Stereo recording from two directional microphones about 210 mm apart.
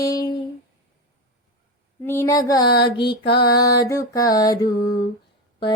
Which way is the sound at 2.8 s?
25° left (ahead or behind).